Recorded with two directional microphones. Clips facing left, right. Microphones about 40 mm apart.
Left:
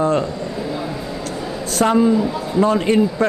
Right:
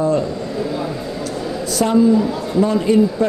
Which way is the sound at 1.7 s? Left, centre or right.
Left.